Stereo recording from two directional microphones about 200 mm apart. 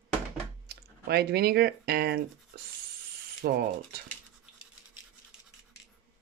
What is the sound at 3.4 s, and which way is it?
Speech, 50° right (ahead or behind).